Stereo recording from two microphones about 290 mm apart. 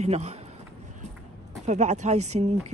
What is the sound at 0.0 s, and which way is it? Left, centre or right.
Speech, right.